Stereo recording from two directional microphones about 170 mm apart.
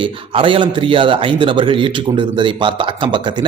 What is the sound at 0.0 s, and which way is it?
Speech, 30° right (ahead or behind).